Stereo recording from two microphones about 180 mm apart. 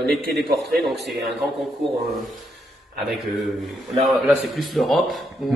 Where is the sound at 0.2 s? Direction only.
60° right (ahead or behind).